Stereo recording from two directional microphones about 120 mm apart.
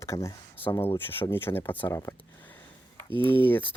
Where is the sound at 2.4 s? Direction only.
15° left (ahead or behind).